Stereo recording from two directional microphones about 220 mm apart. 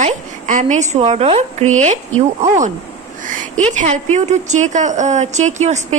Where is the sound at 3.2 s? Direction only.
35° right (ahead or behind).